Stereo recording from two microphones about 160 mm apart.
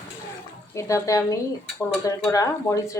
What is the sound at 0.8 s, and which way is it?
Speech, 20° left (ahead or behind).